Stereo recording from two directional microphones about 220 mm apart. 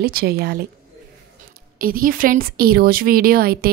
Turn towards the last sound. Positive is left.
turn(degrees=-45)  # may be behind; listen again after turning